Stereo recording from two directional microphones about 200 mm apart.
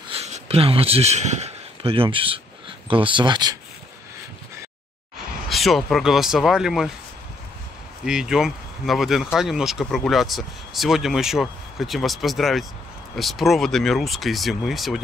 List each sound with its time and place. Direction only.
0.1 s speech: 30° right (ahead or behind)
5.5 s speech: centre (ahead or behind)
8.0 s speech: 5° right (ahead or behind)